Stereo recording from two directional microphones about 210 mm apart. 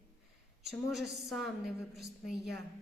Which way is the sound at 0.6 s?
Centre (ahead or behind).